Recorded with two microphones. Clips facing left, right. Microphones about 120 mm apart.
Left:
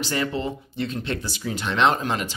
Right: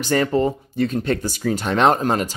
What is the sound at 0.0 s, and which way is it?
Speech, 45° right (ahead or behind).